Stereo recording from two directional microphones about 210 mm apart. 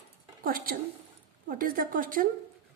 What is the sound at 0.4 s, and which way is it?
A woman's voice, 45° right (ahead or behind).